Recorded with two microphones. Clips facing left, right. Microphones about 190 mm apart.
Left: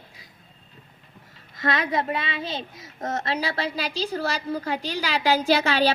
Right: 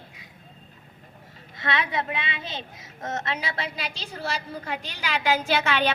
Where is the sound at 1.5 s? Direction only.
40° left (ahead or behind).